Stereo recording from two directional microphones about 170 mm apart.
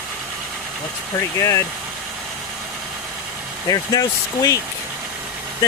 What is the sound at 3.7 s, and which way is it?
Speech, 20° left (ahead or behind).